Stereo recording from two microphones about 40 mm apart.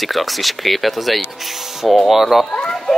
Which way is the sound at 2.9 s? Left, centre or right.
Centre.